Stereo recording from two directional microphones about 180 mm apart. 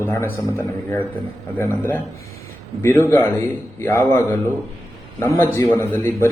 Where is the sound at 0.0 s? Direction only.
15° left (ahead or behind).